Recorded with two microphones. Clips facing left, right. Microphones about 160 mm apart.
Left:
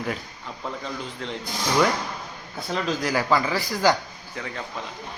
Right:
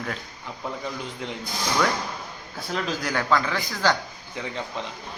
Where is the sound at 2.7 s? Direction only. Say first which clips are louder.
Left 2 dB; centre (ahead or behind).